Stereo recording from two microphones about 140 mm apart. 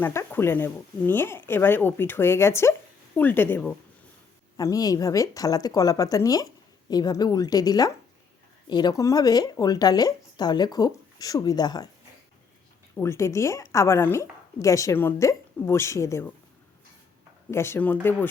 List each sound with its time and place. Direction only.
0.0 s speech: 15° left (ahead or behind)
4.5 s a woman's voice: 25° left (ahead or behind)
13.0 s a woman's voice: 20° left (ahead or behind)
17.5 s speech: 20° left (ahead or behind)